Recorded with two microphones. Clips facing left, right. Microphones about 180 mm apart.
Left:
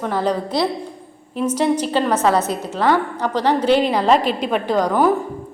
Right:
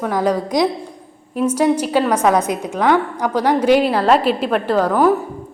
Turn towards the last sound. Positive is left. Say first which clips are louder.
# right 2 dB
turn(degrees=0)  # may be behind; listen again after turning